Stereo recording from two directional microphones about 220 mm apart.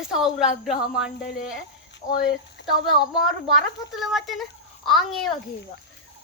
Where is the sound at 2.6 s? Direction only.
55° left (ahead or behind).